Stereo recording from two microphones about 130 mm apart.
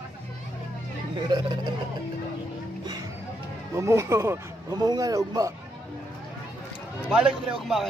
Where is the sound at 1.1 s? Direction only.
35° right (ahead or behind).